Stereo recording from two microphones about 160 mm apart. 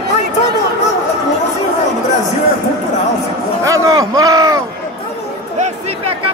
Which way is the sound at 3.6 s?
20° right (ahead or behind).